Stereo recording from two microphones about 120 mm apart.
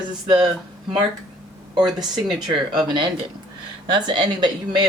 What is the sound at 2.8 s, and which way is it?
Speech, 40° right (ahead or behind).